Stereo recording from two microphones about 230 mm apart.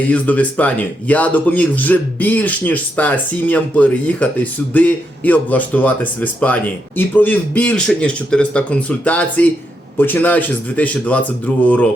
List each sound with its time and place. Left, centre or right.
0.0 s speech: centre